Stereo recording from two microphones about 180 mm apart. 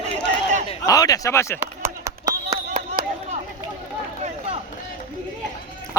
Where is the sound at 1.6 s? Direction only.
15° right (ahead or behind).